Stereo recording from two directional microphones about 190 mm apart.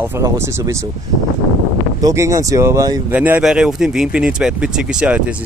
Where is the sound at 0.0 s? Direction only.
15° right (ahead or behind).